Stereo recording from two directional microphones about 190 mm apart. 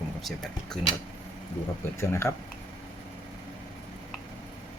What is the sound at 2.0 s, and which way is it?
Speech, 15° left (ahead or behind).